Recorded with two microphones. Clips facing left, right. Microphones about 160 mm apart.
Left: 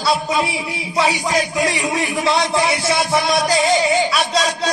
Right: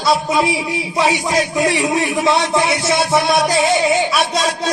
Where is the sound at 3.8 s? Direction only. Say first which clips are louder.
Right 1 dB; 20° right (ahead or behind).